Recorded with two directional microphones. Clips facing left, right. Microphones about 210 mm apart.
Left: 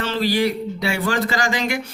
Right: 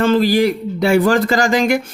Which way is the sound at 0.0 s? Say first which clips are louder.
Right 7 dB; 50° right (ahead or behind).